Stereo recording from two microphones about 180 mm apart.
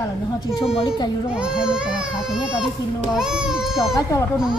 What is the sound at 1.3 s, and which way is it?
Speech, 5° right (ahead or behind).